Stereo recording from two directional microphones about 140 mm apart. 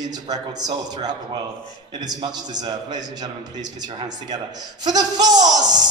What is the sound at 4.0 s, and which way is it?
A man's voice, 30° right (ahead or behind).